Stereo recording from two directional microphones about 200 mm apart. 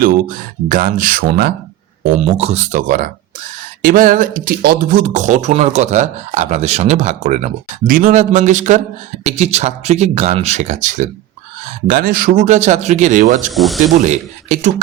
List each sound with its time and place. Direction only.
0.0 s speech: 45° right (ahead or behind)
2.2 s speech: 35° right (ahead or behind)
13.5 s speech: centre (ahead or behind)
14.0 s speech: 35° right (ahead or behind)